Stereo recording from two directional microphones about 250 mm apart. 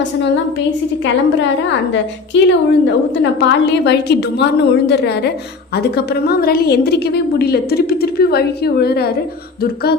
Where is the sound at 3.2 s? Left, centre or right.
Left.